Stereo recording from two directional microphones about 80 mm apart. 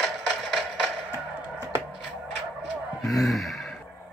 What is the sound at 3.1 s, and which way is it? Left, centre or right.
Speech, centre.